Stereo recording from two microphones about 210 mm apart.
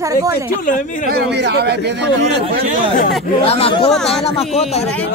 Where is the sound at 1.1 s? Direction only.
50° right (ahead or behind).